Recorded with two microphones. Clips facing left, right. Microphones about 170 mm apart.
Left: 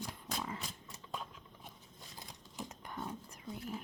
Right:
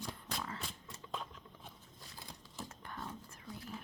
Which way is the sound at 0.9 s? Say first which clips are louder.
Right 1 dB; 10° left (ahead or behind).